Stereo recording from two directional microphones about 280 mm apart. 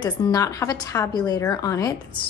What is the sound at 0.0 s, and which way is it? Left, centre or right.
A woman's voice, centre.